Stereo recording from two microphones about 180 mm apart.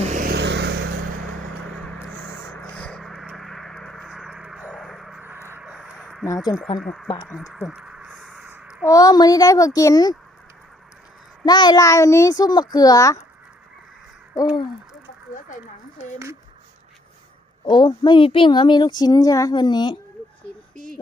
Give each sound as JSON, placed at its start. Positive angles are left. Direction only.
{"t": 0.0, "sound": "vehicle", "side_deg": -40}
{"t": 0.3, "sound": "vehicle", "side_deg": -70}
{"t": 1.8, "sound": "a sound", "side_deg": 5}
{"t": 6.2, "sound": "speech", "side_deg": 20}
{"t": 6.7, "sound": "speech", "side_deg": 0}
{"t": 7.3, "sound": "a sound", "side_deg": 0}
{"t": 8.9, "sound": "speech", "side_deg": 20}
{"t": 11.4, "sound": "speech", "side_deg": 25}
{"t": 14.5, "sound": "bird", "side_deg": 25}
{"t": 17.7, "sound": "speech", "side_deg": 25}